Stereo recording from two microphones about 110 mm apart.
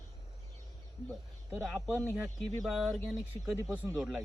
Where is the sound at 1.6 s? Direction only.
Centre (ahead or behind).